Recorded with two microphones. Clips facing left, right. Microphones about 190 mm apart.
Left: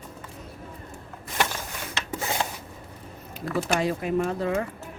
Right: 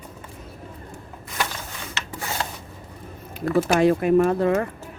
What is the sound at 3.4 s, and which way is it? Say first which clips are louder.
Speech: right 7 dB; 55° right (ahead or behind).